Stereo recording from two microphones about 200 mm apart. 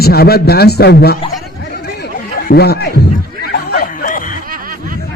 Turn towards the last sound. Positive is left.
turn(degrees=45)  # may be behind; listen again after turning